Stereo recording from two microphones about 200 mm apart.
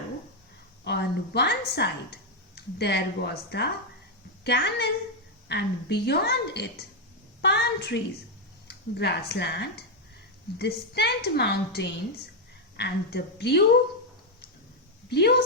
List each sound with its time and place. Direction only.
0.9 s a woman's voice: 55° left (ahead or behind)
15.1 s a woman's voice: 55° left (ahead or behind)